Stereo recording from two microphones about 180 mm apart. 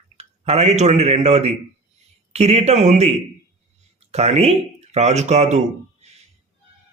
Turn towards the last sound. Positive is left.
turn(degrees=-40)  # may be behind; listen again after turning